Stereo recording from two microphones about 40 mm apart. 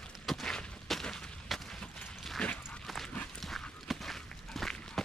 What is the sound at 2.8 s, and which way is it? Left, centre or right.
Dog, centre.